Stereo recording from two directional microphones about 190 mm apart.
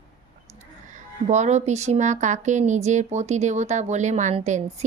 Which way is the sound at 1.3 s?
35° right (ahead or behind).